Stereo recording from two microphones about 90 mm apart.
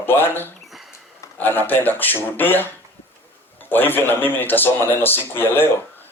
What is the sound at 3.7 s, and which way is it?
Speech, 20° left (ahead or behind).